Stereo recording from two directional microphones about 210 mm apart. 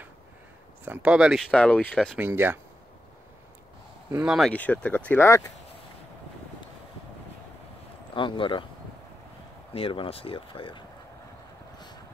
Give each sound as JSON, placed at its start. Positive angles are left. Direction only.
{"t": 0.8, "sound": "speech", "side_deg": -5}
{"t": 2.1, "sound": "speech", "side_deg": -10}
{"t": 4.1, "sound": "speech", "side_deg": -5}
{"t": 8.1, "sound": "speech", "side_deg": 25}
{"t": 9.7, "sound": "speech", "side_deg": 25}